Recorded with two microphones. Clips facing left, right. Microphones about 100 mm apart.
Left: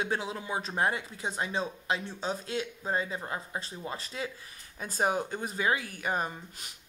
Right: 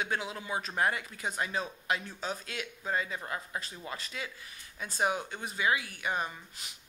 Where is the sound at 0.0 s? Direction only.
30° left (ahead or behind).